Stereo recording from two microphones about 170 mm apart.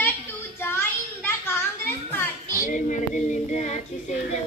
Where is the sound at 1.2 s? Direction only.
15° left (ahead or behind).